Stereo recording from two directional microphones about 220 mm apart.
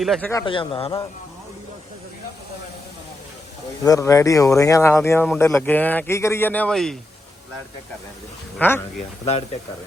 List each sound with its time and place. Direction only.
0.0 s speech: centre (ahead or behind)
0.3 s a man's voice: 20° left (ahead or behind)
3.8 s speech: 15° left (ahead or behind)
8.5 s speech: 10° left (ahead or behind)